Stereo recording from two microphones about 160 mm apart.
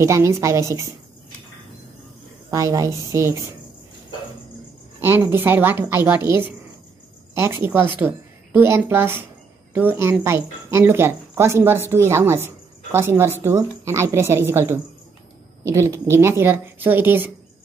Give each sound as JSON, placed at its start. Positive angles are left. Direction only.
{"t": 0.0, "sound": "a woman's voice", "side_deg": -20}
{"t": 2.5, "sound": "a woman's voice", "side_deg": -20}
{"t": 5.0, "sound": "speech", "side_deg": -15}
{"t": 7.6, "sound": "speech", "side_deg": -15}